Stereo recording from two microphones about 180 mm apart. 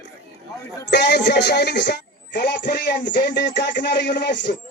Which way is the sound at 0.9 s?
70° left (ahead or behind).